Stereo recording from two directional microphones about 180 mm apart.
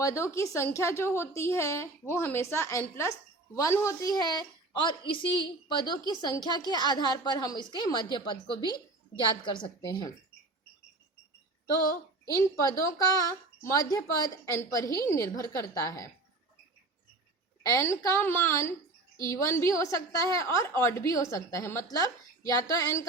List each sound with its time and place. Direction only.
0.0 s a woman's voice: 15° left (ahead or behind)
12.3 s a woman's voice: 15° left (ahead or behind)
17.6 s a woman's voice: 15° left (ahead or behind)